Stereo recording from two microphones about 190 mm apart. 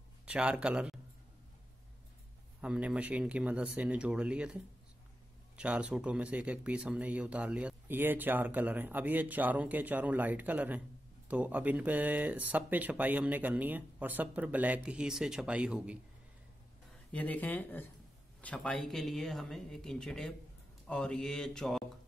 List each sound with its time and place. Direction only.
0.2 s a man's voice: 5° right (ahead or behind)
2.6 s speech: 5° right (ahead or behind)
5.6 s speech: 5° right (ahead or behind)
17.1 s speech: 10° left (ahead or behind)